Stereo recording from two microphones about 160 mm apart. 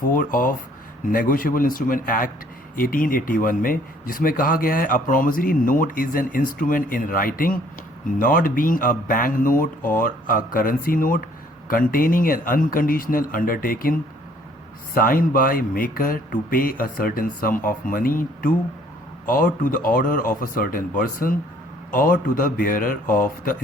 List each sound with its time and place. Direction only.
0.1 s speech: 60° left (ahead or behind)
14.9 s speech: 60° left (ahead or behind)